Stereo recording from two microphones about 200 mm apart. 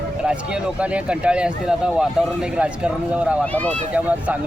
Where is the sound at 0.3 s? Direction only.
5° right (ahead or behind).